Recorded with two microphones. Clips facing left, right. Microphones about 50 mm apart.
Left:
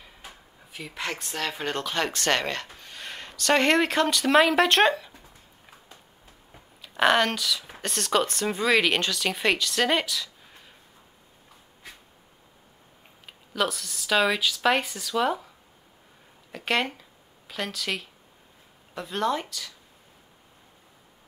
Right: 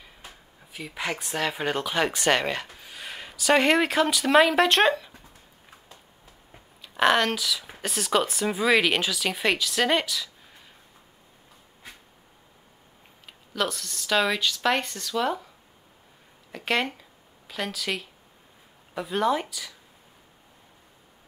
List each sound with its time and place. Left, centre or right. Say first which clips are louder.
0.7 s speech: right 2 dB; centre
6.8 s speech: even; centre
13.5 s speech: left 1 dB; centre
16.5 s speech: even; centre